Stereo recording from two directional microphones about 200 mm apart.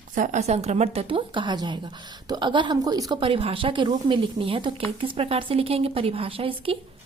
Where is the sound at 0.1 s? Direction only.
40° right (ahead or behind).